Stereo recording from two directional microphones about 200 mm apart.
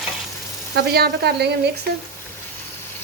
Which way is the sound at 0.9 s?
55° right (ahead or behind).